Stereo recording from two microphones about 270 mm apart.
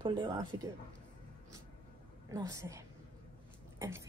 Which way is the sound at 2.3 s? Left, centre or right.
Centre.